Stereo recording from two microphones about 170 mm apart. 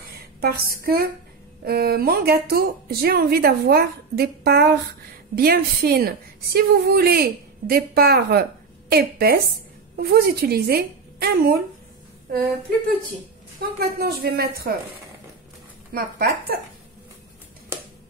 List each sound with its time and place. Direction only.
0.4 s a woman's voice: 65° right (ahead or behind)
13.6 s a woman's voice: 65° right (ahead or behind)
15.9 s a woman's voice: 60° right (ahead or behind)